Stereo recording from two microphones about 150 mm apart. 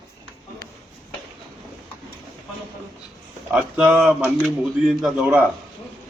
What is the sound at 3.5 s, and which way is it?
Speech, 5° right (ahead or behind).